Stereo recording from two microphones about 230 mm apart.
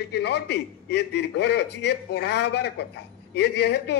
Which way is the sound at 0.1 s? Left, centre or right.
Left.